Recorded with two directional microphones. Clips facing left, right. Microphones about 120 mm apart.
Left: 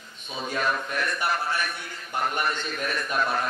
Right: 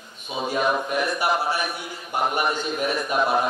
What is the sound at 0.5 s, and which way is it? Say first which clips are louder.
A man's voice: right 5 dB; 20° right (ahead or behind).